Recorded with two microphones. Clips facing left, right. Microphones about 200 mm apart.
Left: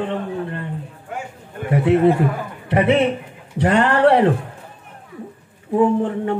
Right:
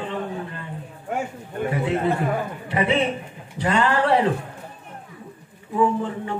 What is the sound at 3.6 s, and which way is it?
Speech, 65° left (ahead or behind).